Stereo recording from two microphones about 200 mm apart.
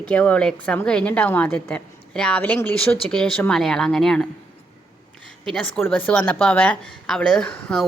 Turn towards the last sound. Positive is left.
turn(degrees=5)  # may be behind; listen again after turning